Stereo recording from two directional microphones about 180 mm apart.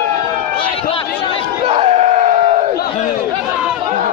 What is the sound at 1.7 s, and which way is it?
Crowd, 35° right (ahead or behind).